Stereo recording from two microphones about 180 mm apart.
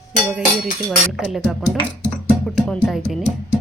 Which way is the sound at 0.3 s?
5° right (ahead or behind).